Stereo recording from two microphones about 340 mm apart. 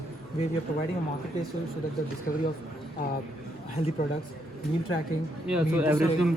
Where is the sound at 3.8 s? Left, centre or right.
Left.